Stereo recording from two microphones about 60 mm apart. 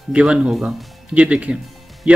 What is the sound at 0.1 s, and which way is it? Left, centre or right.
Speech, centre.